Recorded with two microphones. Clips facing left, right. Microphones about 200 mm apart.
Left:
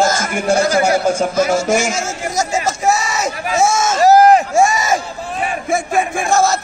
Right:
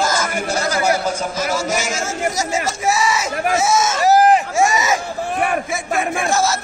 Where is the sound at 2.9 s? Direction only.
50° left (ahead or behind).